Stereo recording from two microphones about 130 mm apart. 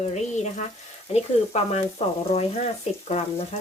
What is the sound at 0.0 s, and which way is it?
Speech, 60° left (ahead or behind).